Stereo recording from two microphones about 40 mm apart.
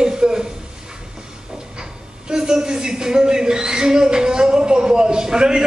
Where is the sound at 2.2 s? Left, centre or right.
Centre.